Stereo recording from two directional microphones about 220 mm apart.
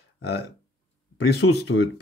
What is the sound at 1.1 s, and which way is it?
Speech, 50° left (ahead or behind).